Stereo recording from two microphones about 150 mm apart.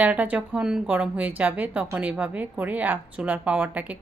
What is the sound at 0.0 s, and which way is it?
Speech, 10° right (ahead or behind).